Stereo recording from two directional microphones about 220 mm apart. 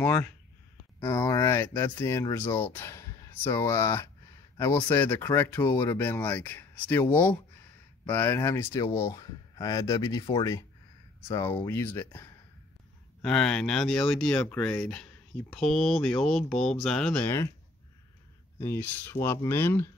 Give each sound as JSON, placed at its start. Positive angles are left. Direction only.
{"t": 0.0, "sound": "speech", "side_deg": 10}
{"t": 18.6, "sound": "speech", "side_deg": 10}